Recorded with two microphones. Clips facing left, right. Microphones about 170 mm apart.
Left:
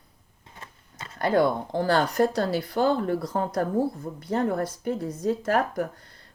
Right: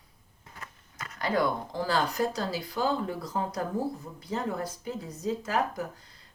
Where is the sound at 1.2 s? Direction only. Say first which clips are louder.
Left 6 dB; 55° left (ahead or behind).